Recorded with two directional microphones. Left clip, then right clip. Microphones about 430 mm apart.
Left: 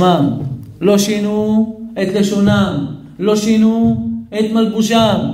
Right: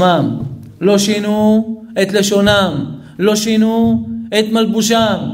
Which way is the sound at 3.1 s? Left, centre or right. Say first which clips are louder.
Right 1 dB; right.